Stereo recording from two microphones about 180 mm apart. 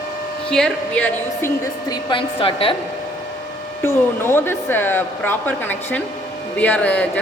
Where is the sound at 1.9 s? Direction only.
25° left (ahead or behind).